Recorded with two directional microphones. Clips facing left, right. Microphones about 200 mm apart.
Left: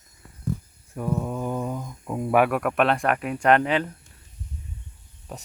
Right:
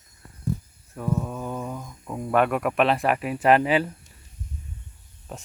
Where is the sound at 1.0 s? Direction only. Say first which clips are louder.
Left 1 dB; 15° left (ahead or behind).